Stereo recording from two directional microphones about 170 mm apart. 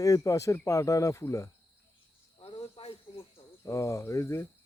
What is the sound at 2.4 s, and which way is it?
Cricket, 30° left (ahead or behind).